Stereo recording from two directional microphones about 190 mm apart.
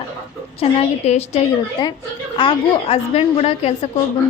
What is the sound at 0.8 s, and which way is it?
Speech, 35° left (ahead or behind).